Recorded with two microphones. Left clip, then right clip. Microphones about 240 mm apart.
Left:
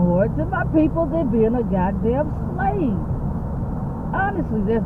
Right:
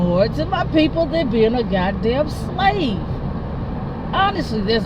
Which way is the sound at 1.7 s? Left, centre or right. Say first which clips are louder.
Right 2 dB; right.